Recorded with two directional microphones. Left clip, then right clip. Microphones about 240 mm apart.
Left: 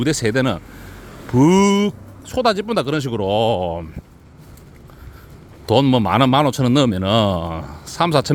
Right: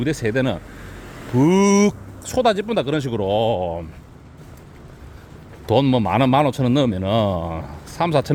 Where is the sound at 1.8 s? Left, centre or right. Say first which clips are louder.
Right 3 dB; centre.